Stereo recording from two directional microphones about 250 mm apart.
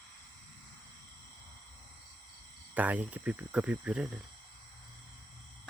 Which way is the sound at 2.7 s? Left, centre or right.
Centre.